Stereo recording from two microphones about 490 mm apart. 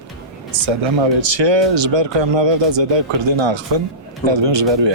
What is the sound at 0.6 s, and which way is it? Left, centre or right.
Speech, right.